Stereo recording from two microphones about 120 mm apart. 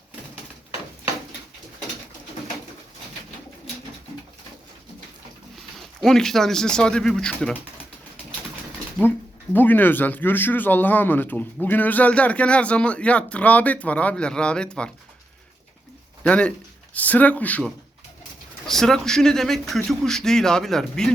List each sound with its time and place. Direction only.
5.5 s speech: centre (ahead or behind)
9.0 s speech: 15° left (ahead or behind)
16.2 s speech: 10° left (ahead or behind)
18.7 s speech: 5° left (ahead or behind)